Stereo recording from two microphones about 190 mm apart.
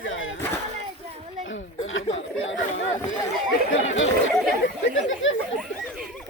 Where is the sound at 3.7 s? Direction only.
90° left.